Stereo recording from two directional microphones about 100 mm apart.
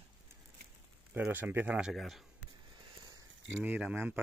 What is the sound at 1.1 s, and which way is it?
Speech, 15° right (ahead or behind).